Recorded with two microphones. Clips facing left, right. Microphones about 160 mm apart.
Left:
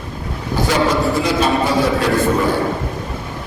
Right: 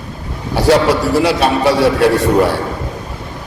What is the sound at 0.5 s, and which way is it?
A man's voice, 75° right (ahead or behind).